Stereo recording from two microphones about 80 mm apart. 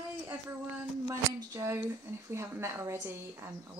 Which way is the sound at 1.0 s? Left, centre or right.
Right.